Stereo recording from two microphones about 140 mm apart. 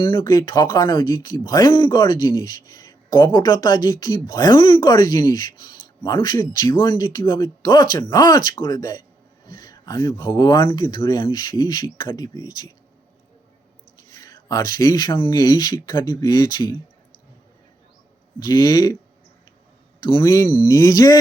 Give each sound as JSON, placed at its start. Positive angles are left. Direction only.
{"t": 0.0, "sound": "speech", "side_deg": 35}
{"t": 14.2, "sound": "speech", "side_deg": 25}
{"t": 18.3, "sound": "speech", "side_deg": 30}
{"t": 20.0, "sound": "a man's voice", "side_deg": 35}
{"t": 20.2, "sound": "speech", "side_deg": 25}